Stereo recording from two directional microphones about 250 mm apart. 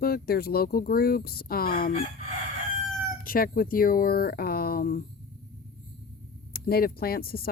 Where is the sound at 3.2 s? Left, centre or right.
Left.